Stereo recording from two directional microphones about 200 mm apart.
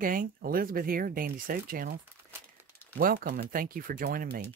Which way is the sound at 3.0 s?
45° right (ahead or behind).